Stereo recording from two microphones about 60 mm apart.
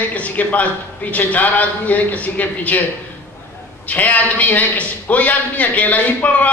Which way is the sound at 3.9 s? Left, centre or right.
Left.